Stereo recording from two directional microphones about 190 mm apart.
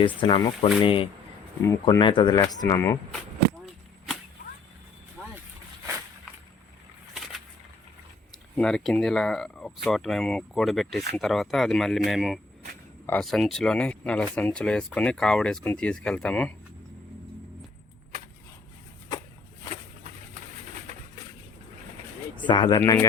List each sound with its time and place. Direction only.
0.0 s speech: 25° left (ahead or behind)
7.1 s a sound: centre (ahead or behind)
8.5 s speech: 5° left (ahead or behind)
22.4 s speech: 25° left (ahead or behind)